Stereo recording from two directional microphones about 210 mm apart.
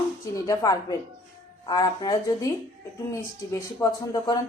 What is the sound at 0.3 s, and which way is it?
A man's voice, 15° left (ahead or behind).